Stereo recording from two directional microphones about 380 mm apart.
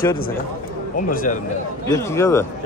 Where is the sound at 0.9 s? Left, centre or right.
Left.